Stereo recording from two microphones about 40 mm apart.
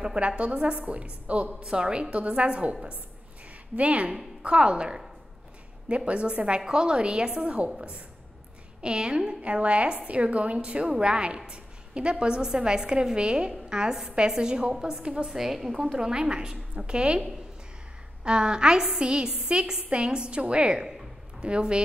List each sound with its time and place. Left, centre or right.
0.0 s a woman's voice: right
1.6 s a woman's voice: right
3.7 s a woman's voice: right
6.6 s a woman's voice: centre
8.8 s a woman's voice: right
9.5 s a woman's voice: right